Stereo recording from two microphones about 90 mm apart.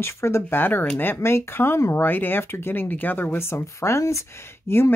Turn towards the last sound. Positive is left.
turn(degrees=25)  # may be behind; listen again after turning